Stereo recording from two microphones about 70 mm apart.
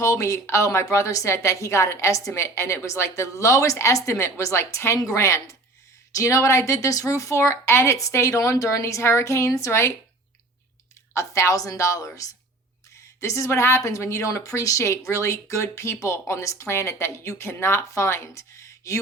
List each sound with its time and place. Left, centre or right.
0.0 s a woman's voice: left
11.1 s a woman's voice: left